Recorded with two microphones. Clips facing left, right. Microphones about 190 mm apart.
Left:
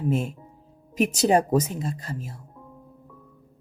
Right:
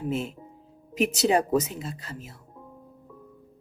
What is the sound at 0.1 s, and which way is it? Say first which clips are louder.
Speech: left 3 dB; 45° left (ahead or behind).